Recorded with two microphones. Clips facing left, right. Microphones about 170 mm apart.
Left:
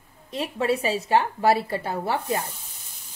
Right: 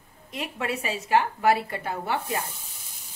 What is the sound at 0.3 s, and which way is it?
Speech, 35° left (ahead or behind).